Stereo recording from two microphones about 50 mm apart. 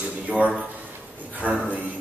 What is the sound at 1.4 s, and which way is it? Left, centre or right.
Speech, right.